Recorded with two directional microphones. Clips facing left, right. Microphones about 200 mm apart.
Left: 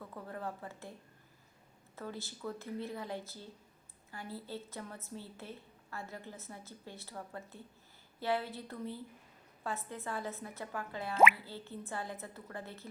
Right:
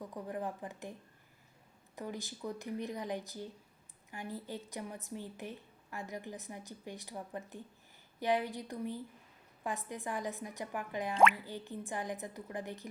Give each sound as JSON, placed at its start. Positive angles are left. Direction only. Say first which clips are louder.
{"t": 0.0, "sound": "a woman's voice", "louder": "right 3 dB", "side_deg": -15}
{"t": 2.0, "sound": "a woman's voice", "louder": "right 2 dB", "side_deg": -15}